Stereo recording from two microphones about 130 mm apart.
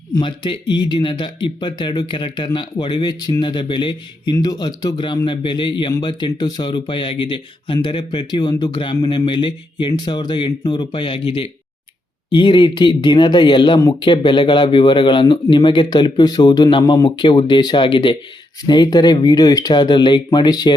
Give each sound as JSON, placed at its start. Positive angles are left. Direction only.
{"t": 0.1, "sound": "speech", "side_deg": 40}